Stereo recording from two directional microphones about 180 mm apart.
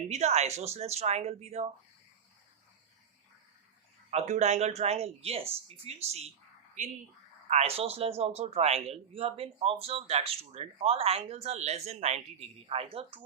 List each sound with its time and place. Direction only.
0.1 s speech: 35° right (ahead or behind)
4.1 s speech: 40° right (ahead or behind)
7.5 s speech: 35° right (ahead or behind)